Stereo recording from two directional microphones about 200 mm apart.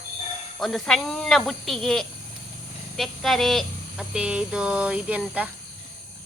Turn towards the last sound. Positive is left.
turn(degrees=-10)  # may be behind; listen again after turning